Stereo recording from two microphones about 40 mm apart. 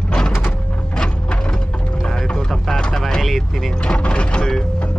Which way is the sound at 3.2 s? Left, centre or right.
Centre.